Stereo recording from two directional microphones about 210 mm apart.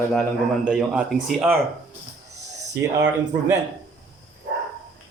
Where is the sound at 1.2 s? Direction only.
5° right (ahead or behind).